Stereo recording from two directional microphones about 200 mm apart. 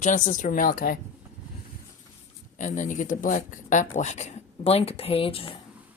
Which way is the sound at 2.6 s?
40° left (ahead or behind).